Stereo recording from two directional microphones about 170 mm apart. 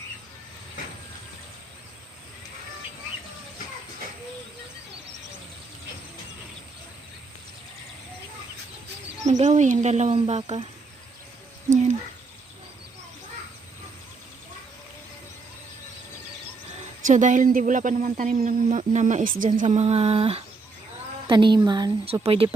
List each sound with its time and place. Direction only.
9.2 s speech: 45° right (ahead or behind)
17.1 s speech: 50° right (ahead or behind)